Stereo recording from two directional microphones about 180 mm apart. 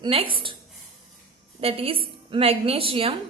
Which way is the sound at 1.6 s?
30° right (ahead or behind).